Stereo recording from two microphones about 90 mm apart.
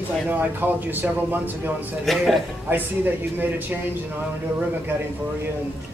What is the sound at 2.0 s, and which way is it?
Speech, centre (ahead or behind).